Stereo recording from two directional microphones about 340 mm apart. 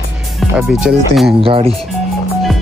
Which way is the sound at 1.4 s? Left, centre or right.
Centre.